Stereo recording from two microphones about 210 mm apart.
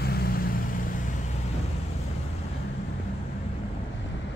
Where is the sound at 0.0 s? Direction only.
45° left (ahead or behind).